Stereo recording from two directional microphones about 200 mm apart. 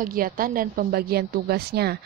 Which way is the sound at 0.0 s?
45° right (ahead or behind).